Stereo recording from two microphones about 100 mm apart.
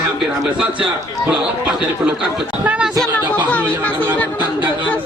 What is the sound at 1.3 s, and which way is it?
Speech, 15° right (ahead or behind).